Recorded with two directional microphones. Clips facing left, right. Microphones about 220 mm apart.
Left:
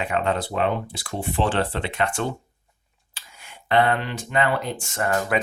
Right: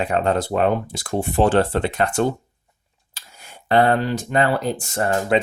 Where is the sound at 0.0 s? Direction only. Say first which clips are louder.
Right 4 dB; 40° right (ahead or behind).